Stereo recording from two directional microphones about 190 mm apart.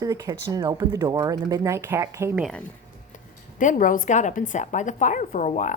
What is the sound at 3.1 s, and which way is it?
Speech, 45° left (ahead or behind).